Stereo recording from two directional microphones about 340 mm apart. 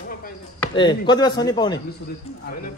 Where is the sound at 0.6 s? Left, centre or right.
Centre.